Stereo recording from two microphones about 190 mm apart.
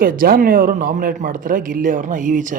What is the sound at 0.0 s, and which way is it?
Speech, 50° right (ahead or behind).